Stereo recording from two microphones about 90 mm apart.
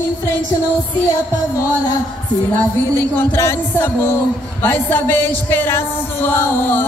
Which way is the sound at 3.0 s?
30° left (ahead or behind).